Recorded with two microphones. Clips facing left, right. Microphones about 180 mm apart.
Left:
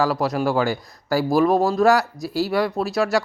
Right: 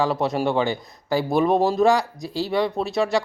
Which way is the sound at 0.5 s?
20° right (ahead or behind).